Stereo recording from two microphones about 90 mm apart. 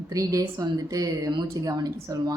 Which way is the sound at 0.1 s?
40° right (ahead or behind).